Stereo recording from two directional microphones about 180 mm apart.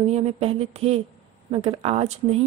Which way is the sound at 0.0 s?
35° right (ahead or behind).